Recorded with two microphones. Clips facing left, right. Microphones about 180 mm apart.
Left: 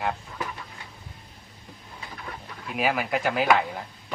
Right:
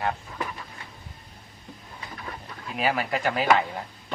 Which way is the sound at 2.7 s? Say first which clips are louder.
Left 1 dB; 5° left (ahead or behind).